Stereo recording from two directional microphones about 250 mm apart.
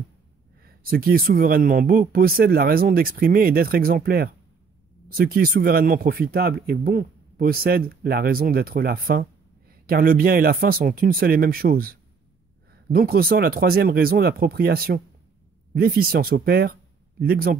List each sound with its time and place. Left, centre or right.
0.7 s speech: right